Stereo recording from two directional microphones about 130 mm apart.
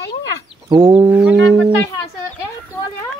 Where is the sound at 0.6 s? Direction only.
35° right (ahead or behind).